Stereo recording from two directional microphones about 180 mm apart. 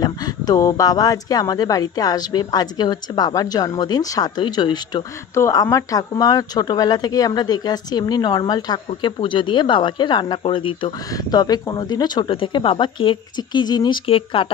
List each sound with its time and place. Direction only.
0.0 s speech: 20° left (ahead or behind)